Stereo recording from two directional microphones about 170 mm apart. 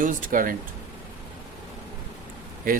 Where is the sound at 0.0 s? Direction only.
50° right (ahead or behind).